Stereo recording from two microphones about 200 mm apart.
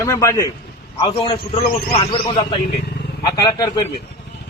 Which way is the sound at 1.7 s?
50° left (ahead or behind).